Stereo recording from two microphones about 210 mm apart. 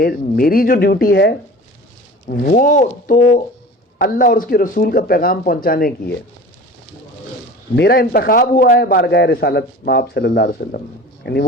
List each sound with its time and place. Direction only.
0.0 s a man's voice: 45° left (ahead or behind)
7.8 s a man's voice: 50° left (ahead or behind)